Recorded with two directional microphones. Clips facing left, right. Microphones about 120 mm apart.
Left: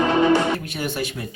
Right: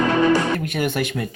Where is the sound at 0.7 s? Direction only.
55° right (ahead or behind).